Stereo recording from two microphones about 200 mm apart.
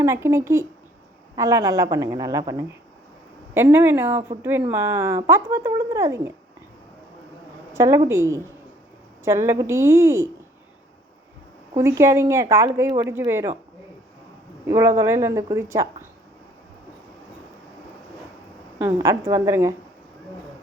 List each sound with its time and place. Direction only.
0.0 s speech: 15° right (ahead or behind)
7.7 s speech: 15° right (ahead or behind)
11.7 s speech: 15° right (ahead or behind)
14.7 s speech: 15° right (ahead or behind)
18.9 s speech: 15° right (ahead or behind)